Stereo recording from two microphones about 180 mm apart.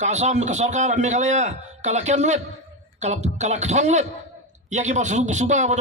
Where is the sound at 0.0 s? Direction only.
40° right (ahead or behind).